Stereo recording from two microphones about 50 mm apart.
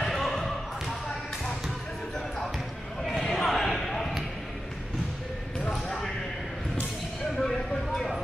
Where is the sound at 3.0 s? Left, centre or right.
Centre.